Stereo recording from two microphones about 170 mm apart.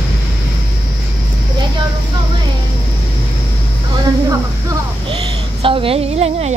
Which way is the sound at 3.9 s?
25° right (ahead or behind).